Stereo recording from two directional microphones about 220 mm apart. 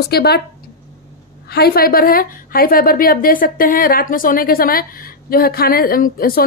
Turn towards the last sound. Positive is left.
turn(degrees=40)  # may be behind; listen again after turning